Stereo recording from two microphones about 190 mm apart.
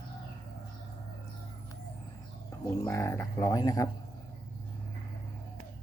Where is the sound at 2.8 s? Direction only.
15° left (ahead or behind).